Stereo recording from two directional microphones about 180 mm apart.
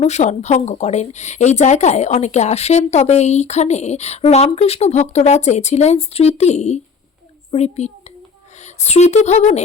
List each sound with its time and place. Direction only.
0.0 s a woman's voice: 40° left (ahead or behind)